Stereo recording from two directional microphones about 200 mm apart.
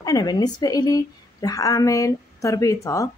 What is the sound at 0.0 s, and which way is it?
Speech, 20° left (ahead or behind).